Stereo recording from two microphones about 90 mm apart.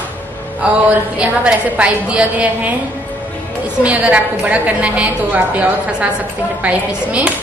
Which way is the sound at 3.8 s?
15° right (ahead or behind).